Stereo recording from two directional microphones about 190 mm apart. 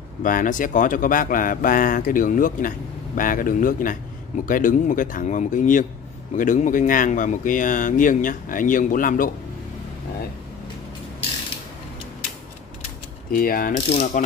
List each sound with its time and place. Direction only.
0.2 s speech: 45° left (ahead or behind)
13.3 s speech: 50° left (ahead or behind)
13.9 s ratchet: 40° left (ahead or behind)